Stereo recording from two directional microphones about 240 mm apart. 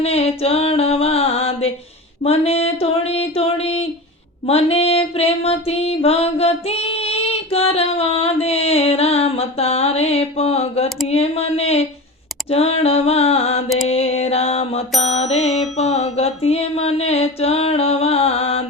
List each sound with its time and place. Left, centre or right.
0.0 s music: left
2.2 s a sound: left
4.4 s music: left
11.1 s speech: left
12.5 s a sound: left
13.8 s mantra: left